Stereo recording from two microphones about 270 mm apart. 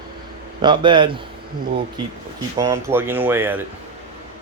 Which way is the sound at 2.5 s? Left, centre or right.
Centre.